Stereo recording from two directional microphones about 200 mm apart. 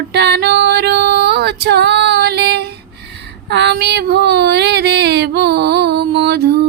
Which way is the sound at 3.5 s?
60° right (ahead or behind).